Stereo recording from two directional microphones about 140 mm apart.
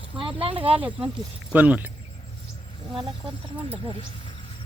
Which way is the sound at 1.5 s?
10° right (ahead or behind).